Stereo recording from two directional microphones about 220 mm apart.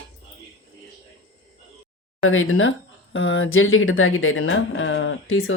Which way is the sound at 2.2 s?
65° left (ahead or behind).